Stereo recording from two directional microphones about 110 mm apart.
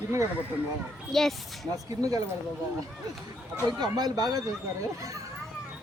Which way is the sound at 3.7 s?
40° right (ahead or behind).